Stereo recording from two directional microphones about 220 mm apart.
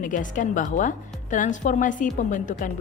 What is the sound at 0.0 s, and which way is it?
A woman's voice, 35° left (ahead or behind).